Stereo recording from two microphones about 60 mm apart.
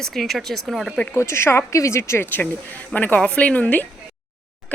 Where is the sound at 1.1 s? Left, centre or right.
Left.